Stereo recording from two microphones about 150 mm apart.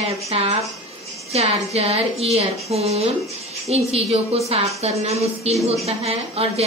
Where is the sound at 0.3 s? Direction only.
45° right (ahead or behind).